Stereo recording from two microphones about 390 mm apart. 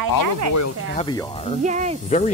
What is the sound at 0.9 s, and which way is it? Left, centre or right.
Speech, centre.